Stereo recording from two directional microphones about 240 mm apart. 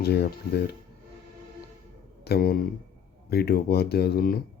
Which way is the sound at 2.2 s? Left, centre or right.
Left.